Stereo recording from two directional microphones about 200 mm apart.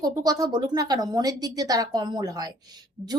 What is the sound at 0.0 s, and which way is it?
A woman's voice, 20° right (ahead or behind).